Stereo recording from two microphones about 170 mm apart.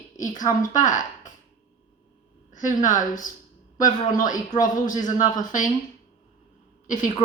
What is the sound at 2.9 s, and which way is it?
Speech, 50° left (ahead or behind).